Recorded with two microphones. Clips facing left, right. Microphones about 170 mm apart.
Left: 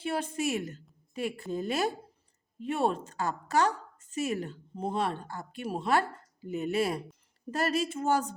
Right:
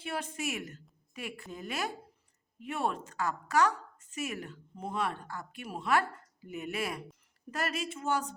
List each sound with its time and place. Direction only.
0.0 s a woman's voice: 30° left (ahead or behind)